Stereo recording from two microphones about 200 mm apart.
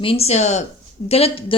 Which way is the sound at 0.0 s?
30° left (ahead or behind).